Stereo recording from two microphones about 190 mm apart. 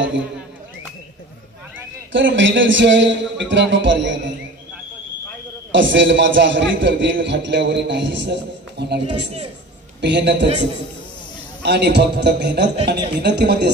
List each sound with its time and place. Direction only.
2.1 s a man's voice: 75° right (ahead or behind)
5.7 s a man's voice: 75° right (ahead or behind)
10.0 s a man's voice: 65° right (ahead or behind)
11.6 s a man's voice: 60° right (ahead or behind)